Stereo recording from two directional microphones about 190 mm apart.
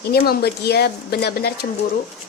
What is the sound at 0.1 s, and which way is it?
A woman's voice, 55° left (ahead or behind).